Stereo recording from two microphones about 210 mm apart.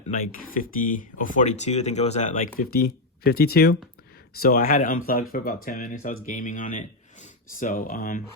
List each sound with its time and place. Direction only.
0.1 s speech: 40° left (ahead or behind)